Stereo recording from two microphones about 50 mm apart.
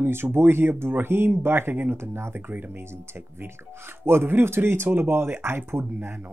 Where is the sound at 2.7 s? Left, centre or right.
Right.